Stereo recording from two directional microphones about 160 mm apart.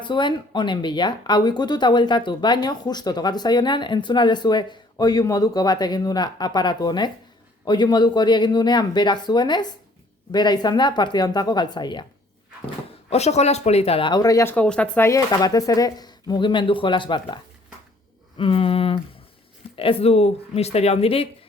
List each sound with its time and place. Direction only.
0.0 s speech: 30° left (ahead or behind)
13.1 s speech: 45° left (ahead or behind); by 14.5 s 20° left (ahead or behind)
14.5 s speech: 5° left (ahead or behind); by 21.2 s 35° left (ahead or behind)